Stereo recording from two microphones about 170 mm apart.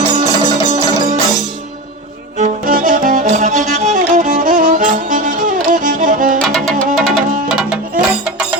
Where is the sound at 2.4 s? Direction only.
55° right (ahead or behind).